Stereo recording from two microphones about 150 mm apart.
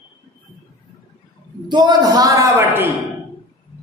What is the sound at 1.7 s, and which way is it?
A man's voice, 30° right (ahead or behind).